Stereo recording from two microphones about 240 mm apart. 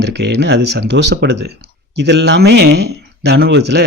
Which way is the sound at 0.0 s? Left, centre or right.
Right.